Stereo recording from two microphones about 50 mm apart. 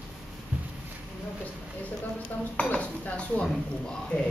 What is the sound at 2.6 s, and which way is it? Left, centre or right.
Dishes, left.